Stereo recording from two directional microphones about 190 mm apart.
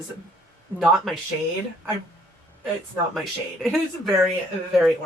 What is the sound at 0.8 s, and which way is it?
Speech, centre (ahead or behind).